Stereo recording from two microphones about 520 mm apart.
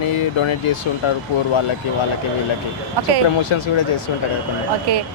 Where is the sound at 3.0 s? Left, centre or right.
Right.